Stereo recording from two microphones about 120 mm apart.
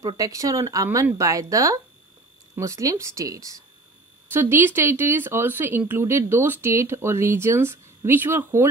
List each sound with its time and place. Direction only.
0.0 s speech: 30° right (ahead or behind)